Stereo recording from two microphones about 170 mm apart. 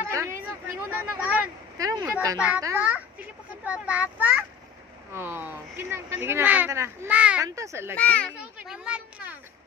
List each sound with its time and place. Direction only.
0.0 s a sound: 15° right (ahead or behind)
1.8 s speech: 20° right (ahead or behind)
2.3 s a child's voice: 5° right (ahead or behind)
7.4 s speech: 20° right (ahead or behind)
7.9 s a child's voice: 10° left (ahead or behind)
8.4 s speech: 5° right (ahead or behind)